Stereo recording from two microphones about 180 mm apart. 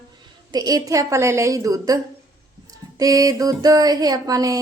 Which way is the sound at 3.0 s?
20° right (ahead or behind).